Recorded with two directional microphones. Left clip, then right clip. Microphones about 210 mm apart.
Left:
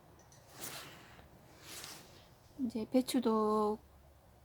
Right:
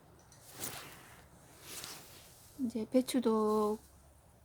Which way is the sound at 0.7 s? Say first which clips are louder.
Even; 20° right (ahead or behind).